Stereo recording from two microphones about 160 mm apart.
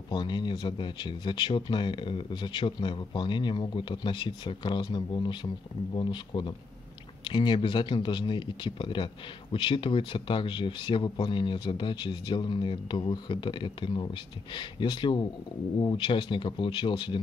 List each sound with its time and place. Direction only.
0.1 s speech: 30° left (ahead or behind)